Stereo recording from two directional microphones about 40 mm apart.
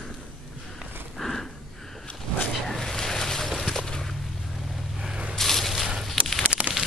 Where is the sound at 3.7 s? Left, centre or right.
Centre.